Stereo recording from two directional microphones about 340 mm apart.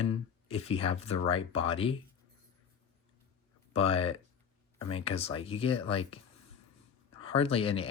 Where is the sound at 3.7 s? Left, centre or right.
Centre.